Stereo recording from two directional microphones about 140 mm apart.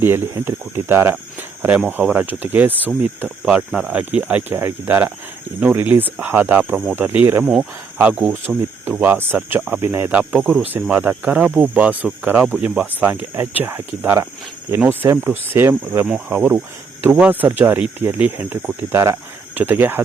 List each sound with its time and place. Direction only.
0.0 s speech: 15° right (ahead or behind)